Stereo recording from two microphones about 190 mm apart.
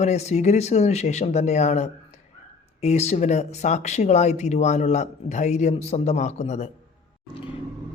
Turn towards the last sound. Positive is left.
turn(degrees=35)  # may be behind; listen again after turning